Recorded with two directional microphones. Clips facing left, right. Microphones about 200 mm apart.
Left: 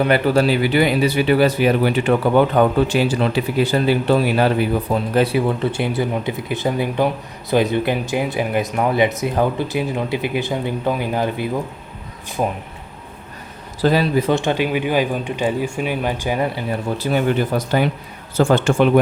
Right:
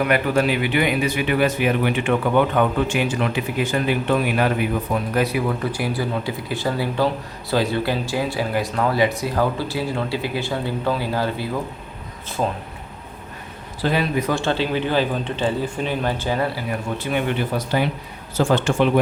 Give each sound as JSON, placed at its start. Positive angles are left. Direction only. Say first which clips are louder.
{"t": 0.0, "sound": "speech", "louder": "left 3 dB", "side_deg": 30}
{"t": 13.8, "sound": "speech", "louder": "left 5 dB", "side_deg": 35}
{"t": 17.0, "sound": "speech", "louder": "left 5 dB", "side_deg": 40}